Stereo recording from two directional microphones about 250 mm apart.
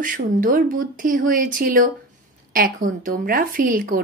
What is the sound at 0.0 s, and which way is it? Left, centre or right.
Speech, right.